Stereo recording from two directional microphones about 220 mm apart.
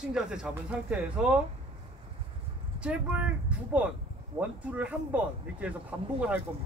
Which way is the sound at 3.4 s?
5° right (ahead or behind).